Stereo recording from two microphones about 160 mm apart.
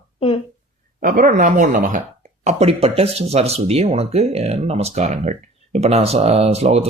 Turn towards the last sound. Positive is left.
turn(degrees=-40)  # may be behind; listen again after turning